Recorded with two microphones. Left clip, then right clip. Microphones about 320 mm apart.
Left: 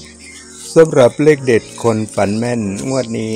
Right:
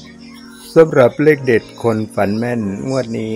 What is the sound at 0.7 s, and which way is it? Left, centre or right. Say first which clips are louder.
Speech: left 1 dB; right.